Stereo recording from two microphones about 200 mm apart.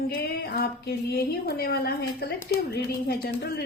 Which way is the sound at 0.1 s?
55° left (ahead or behind).